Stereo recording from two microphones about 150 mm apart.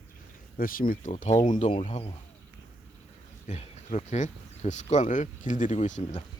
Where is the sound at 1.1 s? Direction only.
50° left (ahead or behind).